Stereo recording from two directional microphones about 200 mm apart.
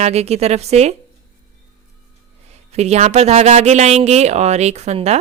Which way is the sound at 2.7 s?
35° right (ahead or behind).